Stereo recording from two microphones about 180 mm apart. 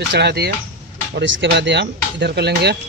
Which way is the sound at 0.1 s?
65° right (ahead or behind).